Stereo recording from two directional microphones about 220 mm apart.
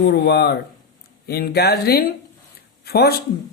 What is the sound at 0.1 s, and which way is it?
Speech, 50° left (ahead or behind).